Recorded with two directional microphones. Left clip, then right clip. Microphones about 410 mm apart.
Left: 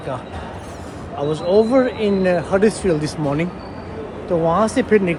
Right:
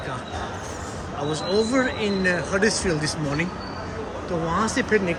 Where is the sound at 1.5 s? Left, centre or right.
Centre.